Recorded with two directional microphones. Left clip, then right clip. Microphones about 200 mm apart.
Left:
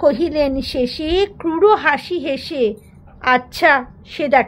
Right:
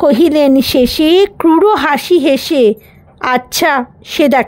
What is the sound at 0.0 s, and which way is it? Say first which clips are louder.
Speech: right 7 dB; 55° right (ahead or behind).